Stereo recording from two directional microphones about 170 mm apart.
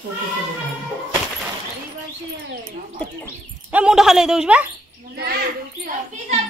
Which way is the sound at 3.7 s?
5° right (ahead or behind).